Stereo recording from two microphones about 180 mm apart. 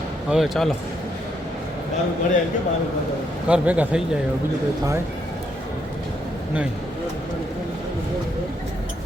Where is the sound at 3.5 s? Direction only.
5° right (ahead or behind).